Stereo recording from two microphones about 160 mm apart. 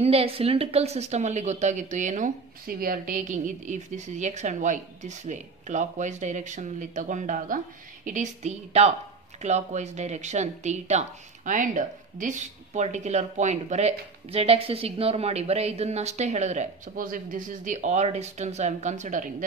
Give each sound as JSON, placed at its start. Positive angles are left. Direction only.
{"t": 0.0, "sound": "speech", "side_deg": -40}